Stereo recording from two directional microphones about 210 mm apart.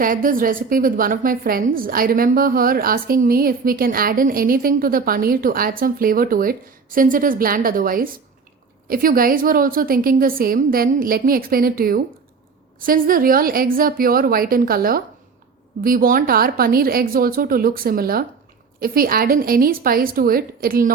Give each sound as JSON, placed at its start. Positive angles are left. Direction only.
{"t": 0.0, "sound": "a woman's voice", "side_deg": -40}